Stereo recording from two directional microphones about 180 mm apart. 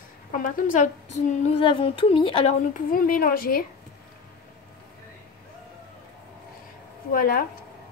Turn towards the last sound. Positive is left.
turn(degrees=50)  # may be behind; listen again after turning